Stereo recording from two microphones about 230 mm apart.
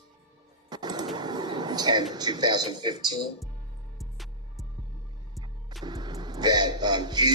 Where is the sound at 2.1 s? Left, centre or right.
Centre.